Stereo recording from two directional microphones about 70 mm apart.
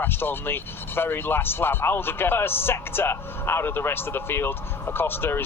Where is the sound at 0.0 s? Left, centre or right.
Left.